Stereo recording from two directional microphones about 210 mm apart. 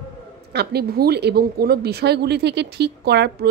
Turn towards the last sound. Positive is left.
turn(degrees=-50)  # may be behind; listen again after turning